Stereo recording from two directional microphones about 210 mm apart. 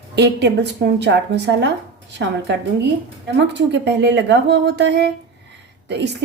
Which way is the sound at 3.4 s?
55° right (ahead or behind).